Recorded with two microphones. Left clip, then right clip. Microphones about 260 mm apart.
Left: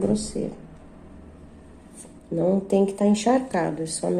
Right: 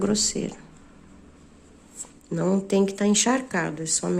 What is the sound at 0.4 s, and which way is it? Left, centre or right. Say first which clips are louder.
Speech: left 1 dB; right.